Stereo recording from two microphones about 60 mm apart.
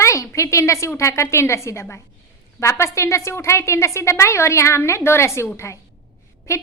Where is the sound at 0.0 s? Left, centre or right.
Left.